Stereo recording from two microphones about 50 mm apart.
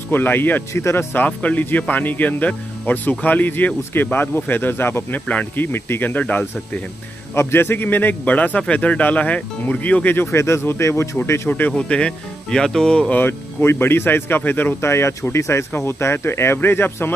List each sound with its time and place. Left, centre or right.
0.1 s speech: left
7.3 s speech: left
10.3 s speech: left
11.4 s speech: left
11.7 s speech: centre
13.3 s speech: left
14.8 s speech: left
15.7 s speech: left